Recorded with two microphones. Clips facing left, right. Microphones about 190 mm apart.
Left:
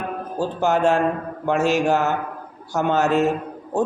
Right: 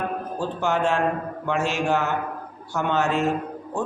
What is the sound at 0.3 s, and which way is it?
A man's voice, 40° left (ahead or behind).